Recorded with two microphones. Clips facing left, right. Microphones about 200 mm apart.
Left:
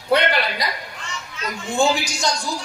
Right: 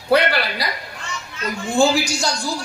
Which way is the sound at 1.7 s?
30° right (ahead or behind).